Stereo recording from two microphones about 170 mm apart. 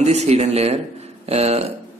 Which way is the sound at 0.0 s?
40° right (ahead or behind).